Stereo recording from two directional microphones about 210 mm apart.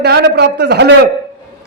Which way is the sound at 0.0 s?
50° right (ahead or behind).